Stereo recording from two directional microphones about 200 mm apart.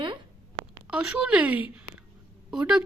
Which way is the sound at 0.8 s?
5° right (ahead or behind).